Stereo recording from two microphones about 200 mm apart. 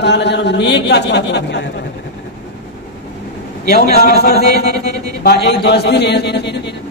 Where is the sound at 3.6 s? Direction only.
50° left (ahead or behind).